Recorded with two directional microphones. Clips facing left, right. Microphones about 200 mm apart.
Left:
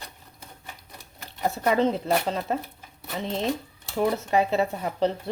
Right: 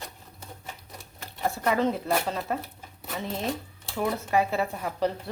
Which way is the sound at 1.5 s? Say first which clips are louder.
Left 3 dB; 20° left (ahead or behind).